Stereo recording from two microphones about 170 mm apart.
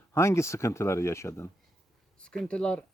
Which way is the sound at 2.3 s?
5° left (ahead or behind).